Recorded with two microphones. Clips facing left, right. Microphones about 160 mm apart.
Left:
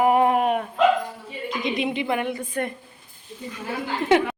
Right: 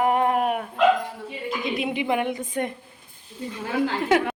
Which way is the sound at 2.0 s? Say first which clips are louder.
Right 1 dB; 15° right (ahead or behind).